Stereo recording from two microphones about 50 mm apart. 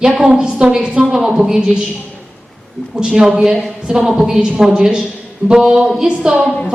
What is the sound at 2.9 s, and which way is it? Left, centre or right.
A woman's voice, centre.